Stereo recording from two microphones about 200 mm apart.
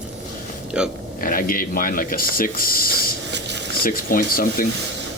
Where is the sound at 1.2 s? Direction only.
45° left (ahead or behind).